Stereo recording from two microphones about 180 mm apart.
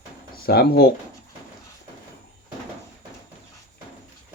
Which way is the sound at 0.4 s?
60° left (ahead or behind).